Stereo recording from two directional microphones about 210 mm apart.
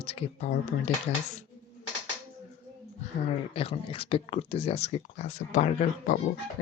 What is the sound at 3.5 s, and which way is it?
Speech, 25° left (ahead or behind).